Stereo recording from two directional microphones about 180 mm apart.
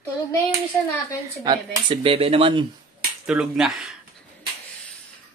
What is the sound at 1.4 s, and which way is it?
Speech, 25° right (ahead or behind).